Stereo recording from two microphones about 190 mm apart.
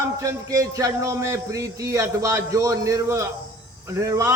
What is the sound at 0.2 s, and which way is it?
A man's voice, 15° right (ahead or behind).